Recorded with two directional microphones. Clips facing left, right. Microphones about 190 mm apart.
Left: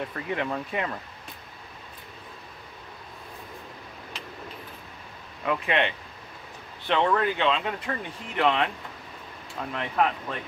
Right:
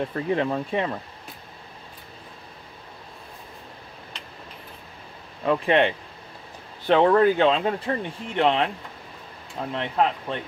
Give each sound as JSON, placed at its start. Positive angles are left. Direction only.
{"t": 0.0, "sound": "speech", "side_deg": -30}
{"t": 5.4, "sound": "speech", "side_deg": -35}